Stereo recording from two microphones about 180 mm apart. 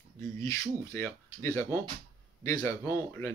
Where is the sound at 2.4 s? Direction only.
20° left (ahead or behind).